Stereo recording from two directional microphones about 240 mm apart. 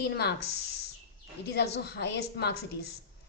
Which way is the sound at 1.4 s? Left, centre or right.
Left.